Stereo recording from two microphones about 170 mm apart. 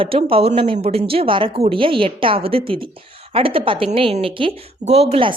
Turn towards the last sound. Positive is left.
turn(degrees=-35)  # may be behind; listen again after turning